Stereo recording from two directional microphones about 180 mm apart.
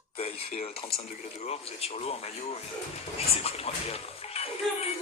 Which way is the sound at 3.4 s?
35° left (ahead or behind).